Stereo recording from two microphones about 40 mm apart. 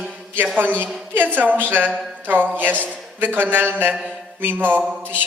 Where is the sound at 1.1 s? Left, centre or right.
Right.